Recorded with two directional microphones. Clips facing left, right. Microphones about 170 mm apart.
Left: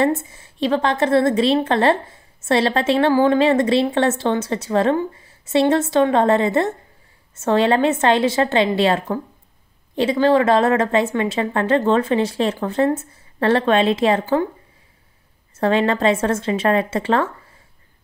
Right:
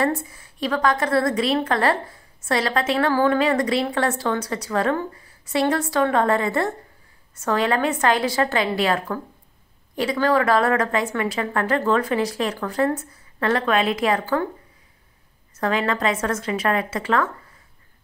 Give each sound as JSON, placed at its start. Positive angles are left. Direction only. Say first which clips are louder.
{"t": 0.0, "sound": "a woman's voice", "louder": "left 4 dB", "side_deg": 25}
{"t": 15.5, "sound": "a woman's voice", "louder": "left 5 dB", "side_deg": 30}